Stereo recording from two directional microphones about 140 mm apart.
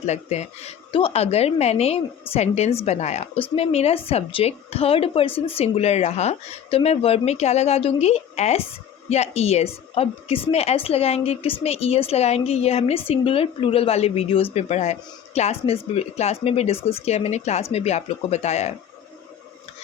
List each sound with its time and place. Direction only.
0.0 s a woman's voice: 50° left (ahead or behind)